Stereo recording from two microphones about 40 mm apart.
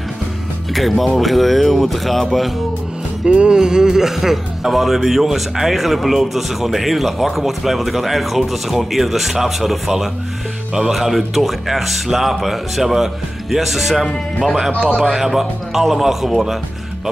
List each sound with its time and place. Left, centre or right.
0.7 s speech: centre
3.3 s music: right
3.5 s speech: centre